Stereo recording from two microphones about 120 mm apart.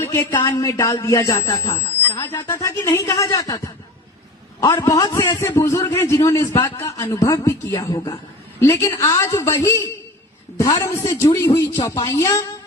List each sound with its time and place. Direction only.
0.0 s speech: 25° left (ahead or behind)